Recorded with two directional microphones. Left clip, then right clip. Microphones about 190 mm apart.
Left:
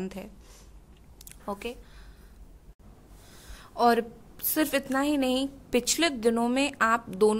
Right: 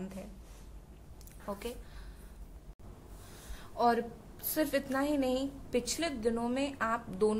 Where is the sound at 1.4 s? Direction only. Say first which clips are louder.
Left 5 dB; 35° left (ahead or behind).